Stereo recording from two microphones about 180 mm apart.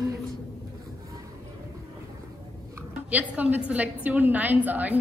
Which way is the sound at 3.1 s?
10° right (ahead or behind).